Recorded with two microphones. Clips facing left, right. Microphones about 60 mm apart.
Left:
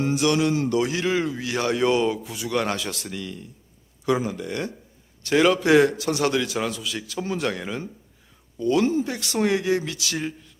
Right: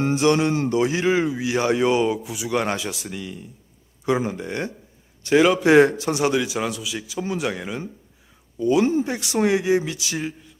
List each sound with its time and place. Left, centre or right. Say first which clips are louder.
0.0 s speech: right 2 dB; right; by 3.4 s centre
4.0 s speech: right 1 dB; right
5.2 s speech: right 2 dB; centre
5.6 s speech: right 3 dB; right
8.9 s speech: right 2 dB; right